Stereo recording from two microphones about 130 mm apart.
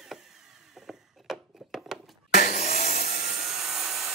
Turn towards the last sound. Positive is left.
turn(degrees=-5)  # may be behind; listen again after turning